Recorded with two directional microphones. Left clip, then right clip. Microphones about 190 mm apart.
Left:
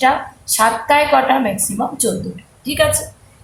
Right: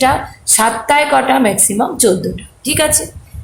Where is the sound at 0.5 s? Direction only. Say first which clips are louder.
Right 1 dB; 50° right (ahead or behind).